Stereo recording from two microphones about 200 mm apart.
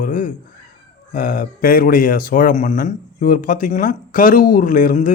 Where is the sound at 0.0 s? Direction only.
40° left (ahead or behind).